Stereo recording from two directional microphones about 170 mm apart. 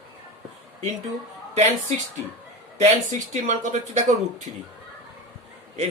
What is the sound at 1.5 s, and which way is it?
Speech, 45° right (ahead or behind).